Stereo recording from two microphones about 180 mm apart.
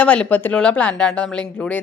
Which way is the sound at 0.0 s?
5° left (ahead or behind).